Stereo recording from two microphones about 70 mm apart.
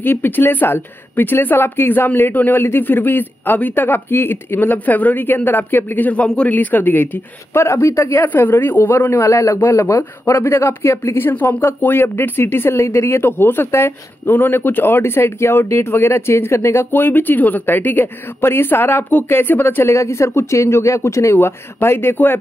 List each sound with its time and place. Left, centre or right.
0.0 s a woman's voice: left
6.2 s a man's voice: centre
6.5 s a woman's voice: left
7.5 s speech: left
8.3 s a woman's voice: left
9.2 s speech: left
10.3 s speech: left
11.2 s speech: left
14.3 s speech: left
16.9 s a woman's voice: left